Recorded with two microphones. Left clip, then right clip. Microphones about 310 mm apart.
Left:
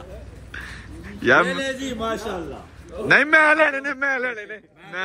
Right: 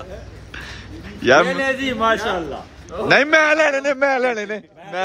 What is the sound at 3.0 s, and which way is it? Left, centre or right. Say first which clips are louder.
A man's voice: right 1 dB; centre.